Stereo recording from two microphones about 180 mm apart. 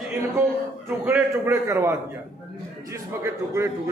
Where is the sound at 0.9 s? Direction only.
10° right (ahead or behind).